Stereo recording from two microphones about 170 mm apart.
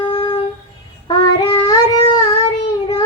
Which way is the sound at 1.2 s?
25° left (ahead or behind).